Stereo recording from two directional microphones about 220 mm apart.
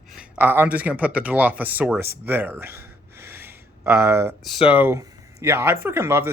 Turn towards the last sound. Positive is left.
turn(degrees=-10)  # may be behind; listen again after turning